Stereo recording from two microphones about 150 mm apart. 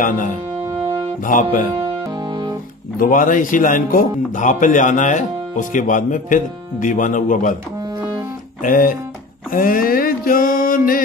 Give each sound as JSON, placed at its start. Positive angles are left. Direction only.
{"t": 1.2, "sound": "speech", "side_deg": 65}
{"t": 3.0, "sound": "speech", "side_deg": 60}
{"t": 8.6, "sound": "a sound", "side_deg": 65}